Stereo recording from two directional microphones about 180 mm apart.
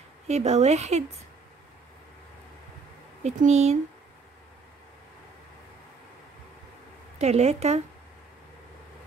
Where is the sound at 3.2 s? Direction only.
40° right (ahead or behind).